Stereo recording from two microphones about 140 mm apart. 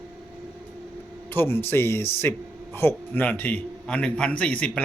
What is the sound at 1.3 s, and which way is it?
A man's voice, 15° left (ahead or behind).